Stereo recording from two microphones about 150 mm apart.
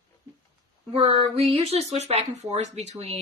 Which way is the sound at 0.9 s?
40° right (ahead or behind).